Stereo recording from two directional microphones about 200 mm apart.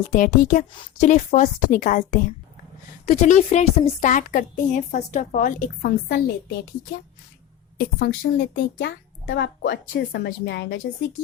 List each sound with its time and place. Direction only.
0.1 s a woman's voice: 40° left (ahead or behind)
7.8 s a woman's voice: 50° left (ahead or behind)
8.2 s speech: 65° left (ahead or behind)